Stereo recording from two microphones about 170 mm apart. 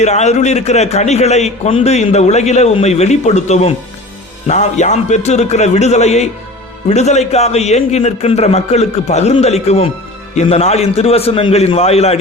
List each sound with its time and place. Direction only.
0.0 s a man's voice: 40° left (ahead or behind)